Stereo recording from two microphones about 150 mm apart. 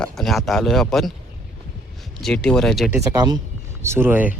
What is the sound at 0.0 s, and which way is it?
Speech, centre (ahead or behind).